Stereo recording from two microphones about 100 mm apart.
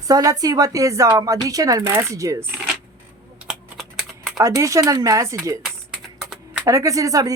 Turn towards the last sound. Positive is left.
turn(degrees=-35)  # may be behind; listen again after turning